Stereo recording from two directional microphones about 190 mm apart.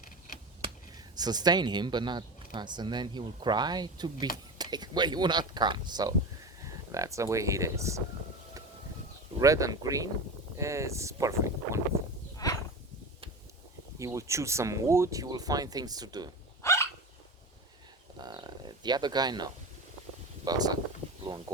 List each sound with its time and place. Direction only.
0.6 s speech: 20° right (ahead or behind)
9.4 s speech: 15° right (ahead or behind)
12.4 s a sound: 20° left (ahead or behind)
14.0 s speech: 15° right (ahead or behind)
16.6 s hiccup: 15° left (ahead or behind)
18.2 s a sound: 20° right (ahead or behind)
20.4 s speech: 20° right (ahead or behind)